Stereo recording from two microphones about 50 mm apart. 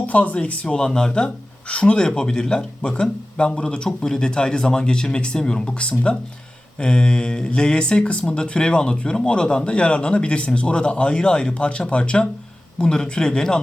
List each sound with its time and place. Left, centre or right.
0.0 s speech: left